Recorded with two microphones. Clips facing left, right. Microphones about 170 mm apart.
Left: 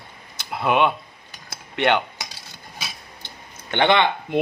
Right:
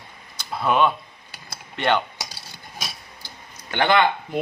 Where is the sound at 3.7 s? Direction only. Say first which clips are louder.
Left 1 dB; 20° left (ahead or behind).